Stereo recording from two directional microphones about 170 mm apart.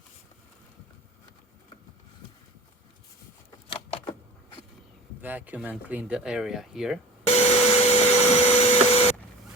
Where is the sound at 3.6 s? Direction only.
35° left (ahead or behind).